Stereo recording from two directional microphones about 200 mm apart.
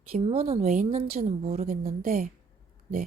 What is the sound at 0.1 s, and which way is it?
A woman's voice, 30° right (ahead or behind).